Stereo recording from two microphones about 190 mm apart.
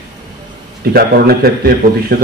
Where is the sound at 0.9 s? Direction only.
55° right (ahead or behind).